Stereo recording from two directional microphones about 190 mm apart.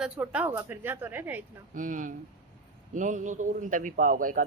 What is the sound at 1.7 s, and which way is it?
Speech, 45° right (ahead or behind).